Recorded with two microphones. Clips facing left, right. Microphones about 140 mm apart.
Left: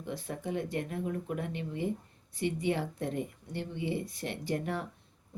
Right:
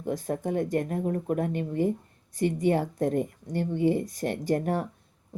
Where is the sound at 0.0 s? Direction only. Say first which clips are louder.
Right 8 dB; 45° right (ahead or behind).